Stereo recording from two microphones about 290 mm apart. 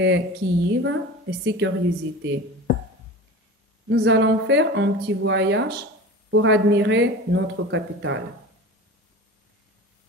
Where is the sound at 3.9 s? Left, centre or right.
Right.